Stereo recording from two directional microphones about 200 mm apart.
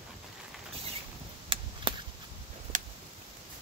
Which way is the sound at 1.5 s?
25° right (ahead or behind).